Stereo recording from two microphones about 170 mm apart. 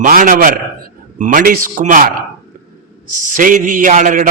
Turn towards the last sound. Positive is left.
turn(degrees=-50)  # may be behind; listen again after turning